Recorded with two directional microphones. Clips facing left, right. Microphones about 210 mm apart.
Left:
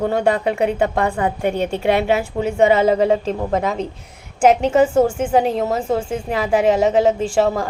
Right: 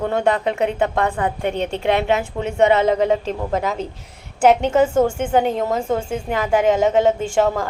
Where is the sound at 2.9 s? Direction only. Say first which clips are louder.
Left 2 dB; 35° left (ahead or behind).